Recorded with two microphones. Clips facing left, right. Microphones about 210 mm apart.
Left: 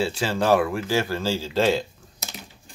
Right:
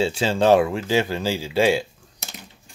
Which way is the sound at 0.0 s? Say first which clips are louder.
Right 4 dB; 25° right (ahead or behind).